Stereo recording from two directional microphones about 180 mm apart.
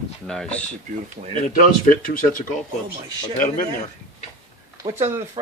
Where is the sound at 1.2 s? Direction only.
45° right (ahead or behind).